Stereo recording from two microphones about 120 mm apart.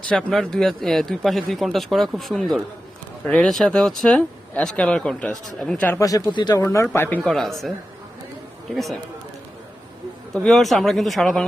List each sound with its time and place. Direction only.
0.1 s a man's voice: 5° left (ahead or behind)
6.0 s speech: 30° left (ahead or behind)
6.6 s speech: 25° left (ahead or behind)
7.3 s a man's voice: centre (ahead or behind)
8.7 s a man's voice: centre (ahead or behind)
10.3 s a man's voice: centre (ahead or behind)